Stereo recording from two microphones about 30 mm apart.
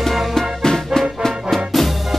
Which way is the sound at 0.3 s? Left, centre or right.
Centre.